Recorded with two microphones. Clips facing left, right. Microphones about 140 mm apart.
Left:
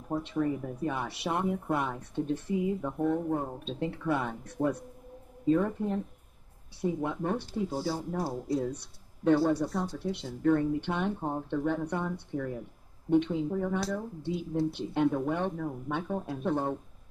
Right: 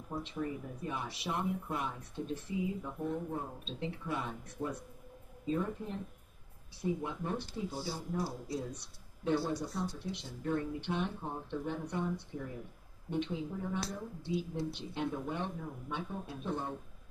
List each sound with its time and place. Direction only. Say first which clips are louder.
0.1 s speech: left 8 dB; 60° left (ahead or behind)